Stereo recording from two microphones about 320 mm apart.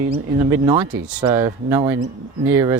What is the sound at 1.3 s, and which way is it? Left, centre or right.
Speech, centre.